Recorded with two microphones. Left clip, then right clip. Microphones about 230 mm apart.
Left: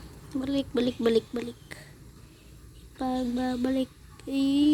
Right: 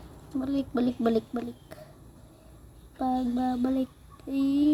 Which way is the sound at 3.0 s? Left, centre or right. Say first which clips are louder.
Right 1 dB; centre.